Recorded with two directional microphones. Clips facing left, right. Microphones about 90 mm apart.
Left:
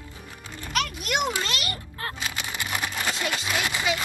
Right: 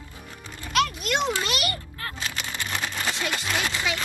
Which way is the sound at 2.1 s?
15° left (ahead or behind).